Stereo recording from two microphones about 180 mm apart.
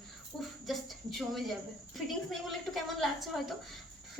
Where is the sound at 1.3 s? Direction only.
Centre (ahead or behind).